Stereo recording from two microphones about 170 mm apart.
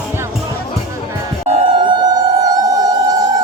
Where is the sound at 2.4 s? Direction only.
20° right (ahead or behind).